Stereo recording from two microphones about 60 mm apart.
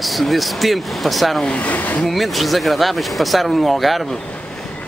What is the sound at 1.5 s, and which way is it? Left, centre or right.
Speech, left.